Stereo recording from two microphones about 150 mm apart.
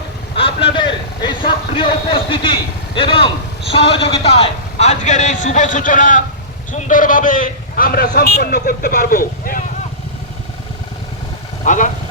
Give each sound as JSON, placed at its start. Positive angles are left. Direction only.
{"t": 0.3, "sound": "a man's voice", "side_deg": 35}
{"t": 11.6, "sound": "speech", "side_deg": 55}